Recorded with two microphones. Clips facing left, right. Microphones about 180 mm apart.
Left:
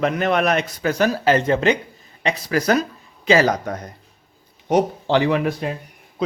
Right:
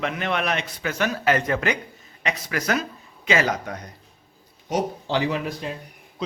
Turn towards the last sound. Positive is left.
turn(degrees=60)  # may be behind; listen again after turning